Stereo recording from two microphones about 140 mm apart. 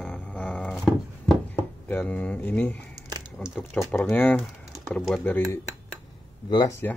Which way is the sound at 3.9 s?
15° left (ahead or behind).